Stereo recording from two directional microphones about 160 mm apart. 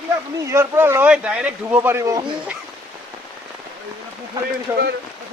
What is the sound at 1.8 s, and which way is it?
Speech, 20° right (ahead or behind).